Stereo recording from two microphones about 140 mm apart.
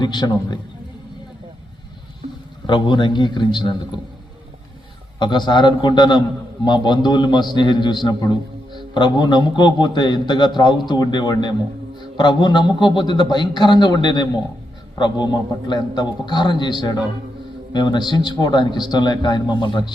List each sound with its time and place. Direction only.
0.0 s a man's voice: 30° left (ahead or behind)
2.2 s a sound: 55° right (ahead or behind)
2.6 s a man's voice: 35° left (ahead or behind)
5.2 s a man's voice: 35° left (ahead or behind)